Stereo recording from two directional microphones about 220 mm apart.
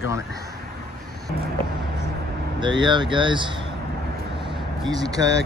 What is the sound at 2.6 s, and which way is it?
Speech, 20° right (ahead or behind).